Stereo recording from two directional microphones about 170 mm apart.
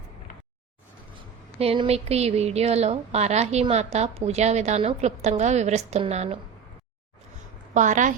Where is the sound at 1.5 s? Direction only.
35° right (ahead or behind).